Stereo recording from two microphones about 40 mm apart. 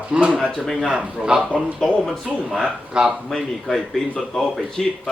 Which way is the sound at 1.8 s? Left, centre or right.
Centre.